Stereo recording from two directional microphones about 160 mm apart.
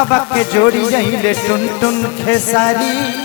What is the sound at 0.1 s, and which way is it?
Speech, 10° left (ahead or behind).